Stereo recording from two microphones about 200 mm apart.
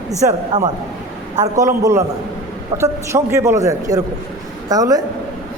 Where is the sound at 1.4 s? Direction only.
15° right (ahead or behind).